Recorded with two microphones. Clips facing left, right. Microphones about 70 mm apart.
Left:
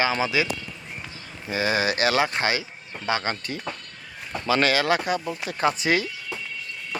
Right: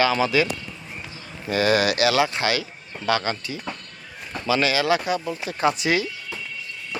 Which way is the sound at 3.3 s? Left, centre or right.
Left.